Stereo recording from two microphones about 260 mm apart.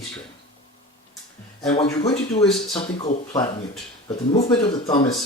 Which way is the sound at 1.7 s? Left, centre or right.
Centre.